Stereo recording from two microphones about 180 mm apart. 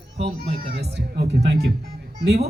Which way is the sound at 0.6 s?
60° right (ahead or behind).